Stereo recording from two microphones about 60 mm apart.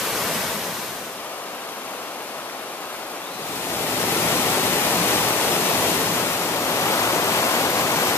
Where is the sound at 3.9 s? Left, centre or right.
Left.